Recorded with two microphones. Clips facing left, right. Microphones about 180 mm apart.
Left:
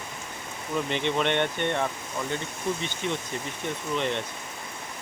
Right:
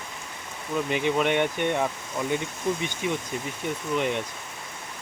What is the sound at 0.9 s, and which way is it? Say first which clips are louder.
Speech: right 3 dB; 5° right (ahead or behind).